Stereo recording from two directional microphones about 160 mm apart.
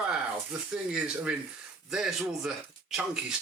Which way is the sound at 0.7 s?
5° right (ahead or behind).